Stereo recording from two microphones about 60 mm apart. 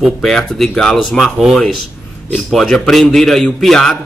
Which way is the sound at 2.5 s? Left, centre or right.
Centre.